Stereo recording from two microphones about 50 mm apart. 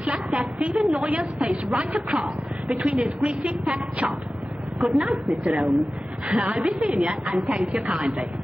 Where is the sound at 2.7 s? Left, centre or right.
Centre.